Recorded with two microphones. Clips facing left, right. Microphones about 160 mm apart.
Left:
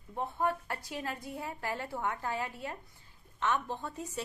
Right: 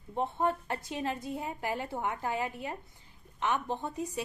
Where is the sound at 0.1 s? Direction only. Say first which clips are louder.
Right 3 dB; 25° right (ahead or behind).